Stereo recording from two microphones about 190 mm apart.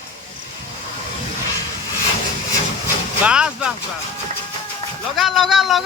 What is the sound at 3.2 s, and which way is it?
Vehicle, 5° right (ahead or behind).